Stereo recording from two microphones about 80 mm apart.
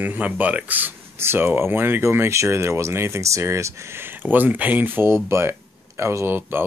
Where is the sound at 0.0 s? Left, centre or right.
Right.